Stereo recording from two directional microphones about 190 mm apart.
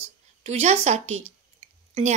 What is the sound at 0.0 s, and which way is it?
A woman's voice, 35° right (ahead or behind).